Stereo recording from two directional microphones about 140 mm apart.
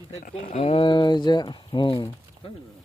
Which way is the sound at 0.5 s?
45° left (ahead or behind).